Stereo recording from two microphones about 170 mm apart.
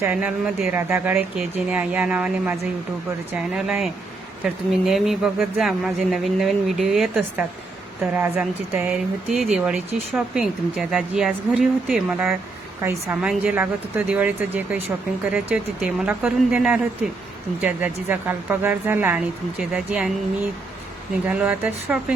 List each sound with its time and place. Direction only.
0.0 s a woman's voice: 10° right (ahead or behind)
12.8 s a woman's voice: 15° right (ahead or behind)
21.2 s a woman's voice: 10° right (ahead or behind)